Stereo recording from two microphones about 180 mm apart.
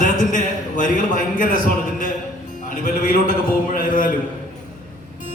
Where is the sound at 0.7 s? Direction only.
45° left (ahead or behind).